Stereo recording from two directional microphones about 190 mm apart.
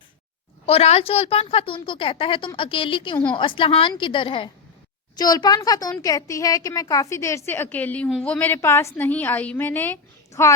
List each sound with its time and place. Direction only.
0.6 s a woman's voice: 35° left (ahead or behind); by 10.5 s 10° left (ahead or behind)